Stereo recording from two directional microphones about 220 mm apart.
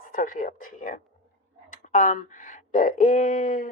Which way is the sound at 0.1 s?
40° left (ahead or behind).